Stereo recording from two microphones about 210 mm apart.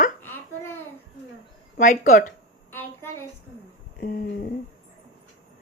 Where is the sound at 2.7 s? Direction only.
10° left (ahead or behind).